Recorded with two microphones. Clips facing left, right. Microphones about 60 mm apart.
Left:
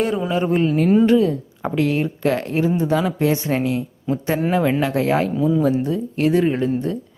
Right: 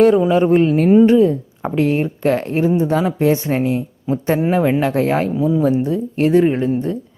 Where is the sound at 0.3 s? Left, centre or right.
Right.